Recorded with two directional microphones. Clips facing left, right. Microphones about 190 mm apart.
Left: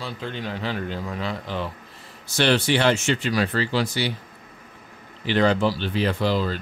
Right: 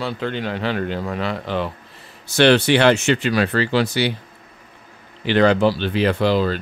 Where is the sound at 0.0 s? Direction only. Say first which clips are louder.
Right 7 dB; 70° right (ahead or behind).